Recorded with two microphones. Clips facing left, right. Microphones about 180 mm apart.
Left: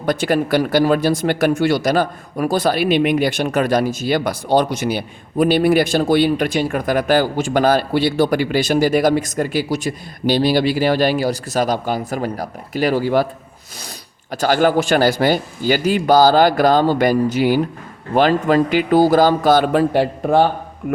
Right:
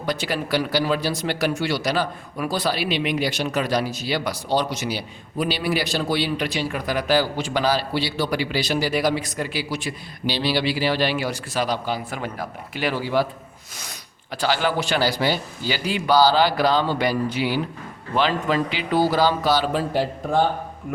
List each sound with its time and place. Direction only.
0.0 s speech: 50° left (ahead or behind)
14.3 s speech: 45° left (ahead or behind); by 20.4 s 65° left (ahead or behind)